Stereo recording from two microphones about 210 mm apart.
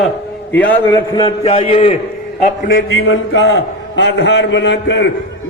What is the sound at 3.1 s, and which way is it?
A man's voice, 60° left (ahead or behind).